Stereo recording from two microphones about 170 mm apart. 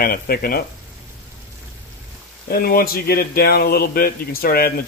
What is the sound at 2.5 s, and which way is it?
Speech, 60° left (ahead or behind).